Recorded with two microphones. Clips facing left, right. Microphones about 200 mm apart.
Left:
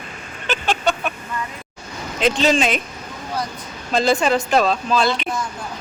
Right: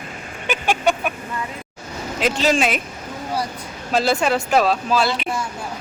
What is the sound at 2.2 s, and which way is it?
Speech, 5° right (ahead or behind).